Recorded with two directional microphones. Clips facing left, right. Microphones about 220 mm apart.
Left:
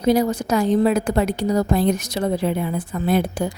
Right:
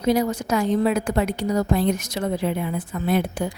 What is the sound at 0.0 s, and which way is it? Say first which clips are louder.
A woman's voice: left 3 dB; 35° left (ahead or behind).